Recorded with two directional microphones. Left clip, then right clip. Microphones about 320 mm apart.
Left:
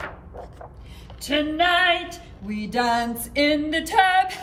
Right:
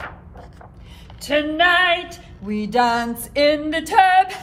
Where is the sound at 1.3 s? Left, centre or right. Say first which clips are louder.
Right 4 dB; right.